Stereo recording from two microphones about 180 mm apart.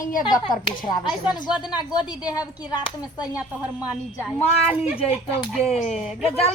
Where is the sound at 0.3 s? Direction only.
25° left (ahead or behind).